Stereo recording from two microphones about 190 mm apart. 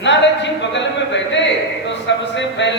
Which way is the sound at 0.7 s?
70° left (ahead or behind).